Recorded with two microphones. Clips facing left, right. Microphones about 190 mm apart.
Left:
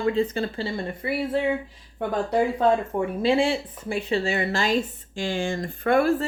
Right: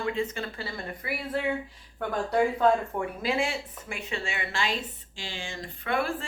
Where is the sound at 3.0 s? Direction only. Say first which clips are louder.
Left 7 dB; 30° left (ahead or behind).